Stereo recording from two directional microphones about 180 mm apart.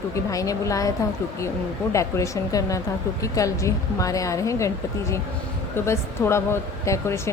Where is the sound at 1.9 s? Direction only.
15° left (ahead or behind).